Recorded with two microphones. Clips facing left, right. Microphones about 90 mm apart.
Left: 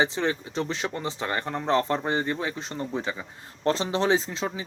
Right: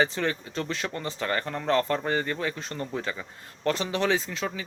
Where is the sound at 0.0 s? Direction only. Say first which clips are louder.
Left 1 dB; 20° left (ahead or behind).